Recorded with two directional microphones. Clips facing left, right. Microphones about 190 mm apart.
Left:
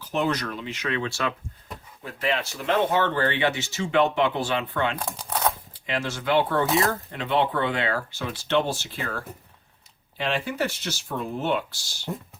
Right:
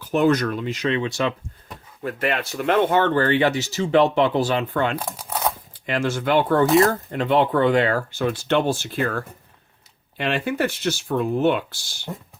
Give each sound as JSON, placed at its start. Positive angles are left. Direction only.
{"t": 0.1, "sound": "speech", "side_deg": -50}
{"t": 0.9, "sound": "speech", "side_deg": -20}
{"t": 2.0, "sound": "speech", "side_deg": -55}
{"t": 4.9, "sound": "speech", "side_deg": -5}
{"t": 5.8, "sound": "speech", "side_deg": -50}
{"t": 6.7, "sound": "speech", "side_deg": 0}
{"t": 7.1, "sound": "speech", "side_deg": -45}